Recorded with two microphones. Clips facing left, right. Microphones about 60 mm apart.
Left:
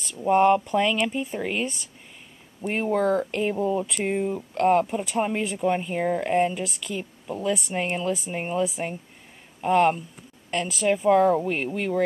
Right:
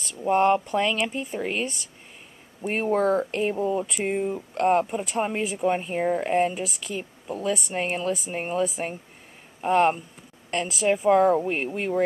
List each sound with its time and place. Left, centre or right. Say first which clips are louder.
0.0 s speech: left 2 dB; centre
2.9 s speech: right 1 dB; centre
3.3 s speech: even; centre